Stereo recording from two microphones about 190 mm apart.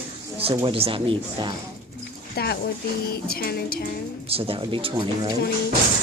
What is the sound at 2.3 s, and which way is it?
Speech, 55° left (ahead or behind).